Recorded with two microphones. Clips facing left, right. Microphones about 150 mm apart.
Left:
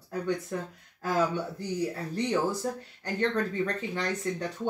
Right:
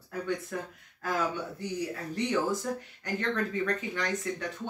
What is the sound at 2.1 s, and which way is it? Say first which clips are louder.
Speech: even; 35° left (ahead or behind).